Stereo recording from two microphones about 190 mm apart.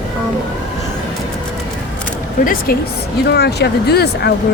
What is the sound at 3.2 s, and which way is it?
Speech, 60° left (ahead or behind).